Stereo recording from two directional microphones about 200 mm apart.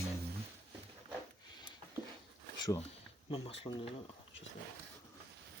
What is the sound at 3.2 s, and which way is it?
Speech, 30° left (ahead or behind).